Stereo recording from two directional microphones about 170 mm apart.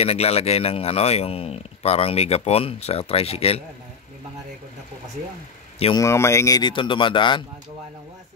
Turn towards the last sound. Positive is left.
turn(degrees=30)  # may be behind; listen again after turning